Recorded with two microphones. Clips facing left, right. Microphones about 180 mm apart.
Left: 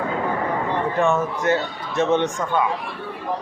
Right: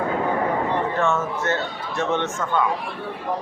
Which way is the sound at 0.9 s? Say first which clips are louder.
Left 2 dB; 15° left (ahead or behind).